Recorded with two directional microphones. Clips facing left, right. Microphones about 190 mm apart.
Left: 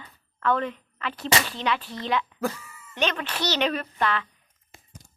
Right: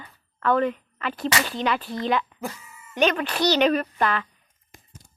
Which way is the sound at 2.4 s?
90° left.